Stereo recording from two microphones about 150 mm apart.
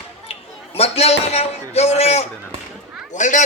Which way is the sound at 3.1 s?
55° left (ahead or behind).